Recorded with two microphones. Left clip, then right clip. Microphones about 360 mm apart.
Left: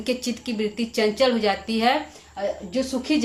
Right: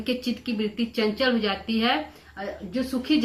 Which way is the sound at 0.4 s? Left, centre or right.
Centre.